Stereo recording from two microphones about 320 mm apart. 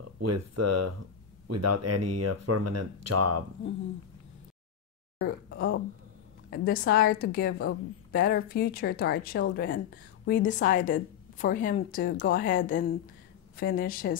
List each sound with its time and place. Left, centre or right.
0.0 s speech: right
5.2 s a woman's voice: left